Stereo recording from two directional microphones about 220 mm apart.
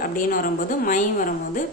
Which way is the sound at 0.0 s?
40° left (ahead or behind).